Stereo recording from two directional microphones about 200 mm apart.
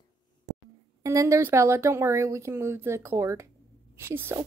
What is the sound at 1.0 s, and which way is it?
Speech, 15° right (ahead or behind).